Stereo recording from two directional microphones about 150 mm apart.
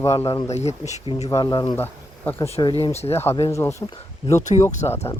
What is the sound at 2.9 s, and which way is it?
Speech, 45° left (ahead or behind).